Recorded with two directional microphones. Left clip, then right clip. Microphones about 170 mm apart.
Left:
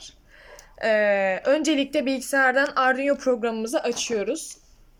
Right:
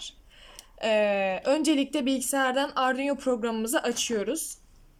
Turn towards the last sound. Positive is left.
turn(degrees=-10)  # may be behind; listen again after turning